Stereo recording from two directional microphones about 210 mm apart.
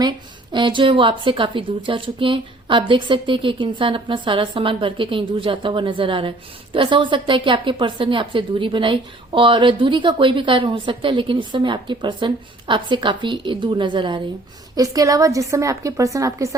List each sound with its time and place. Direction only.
0.5 s a woman's voice: 20° right (ahead or behind)